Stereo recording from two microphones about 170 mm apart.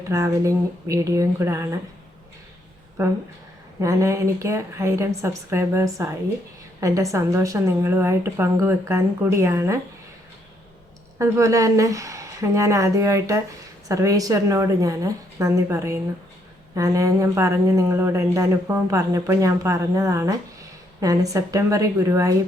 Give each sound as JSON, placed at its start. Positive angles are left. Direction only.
{"t": 0.1, "sound": "a woman's voice", "side_deg": -20}
{"t": 3.8, "sound": "a woman's voice", "side_deg": -15}
{"t": 11.2, "sound": "a woman's voice", "side_deg": -20}